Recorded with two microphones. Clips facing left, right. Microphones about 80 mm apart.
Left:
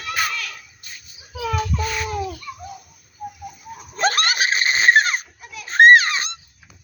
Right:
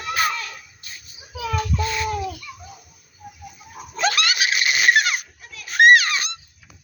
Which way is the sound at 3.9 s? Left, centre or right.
Left.